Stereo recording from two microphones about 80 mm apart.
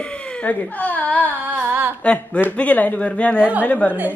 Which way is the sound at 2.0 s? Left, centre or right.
Centre.